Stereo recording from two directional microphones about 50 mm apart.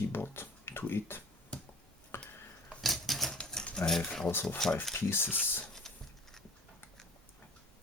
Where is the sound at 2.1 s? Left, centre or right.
Left.